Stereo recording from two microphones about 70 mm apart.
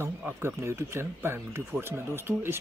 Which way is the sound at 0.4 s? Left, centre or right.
Right.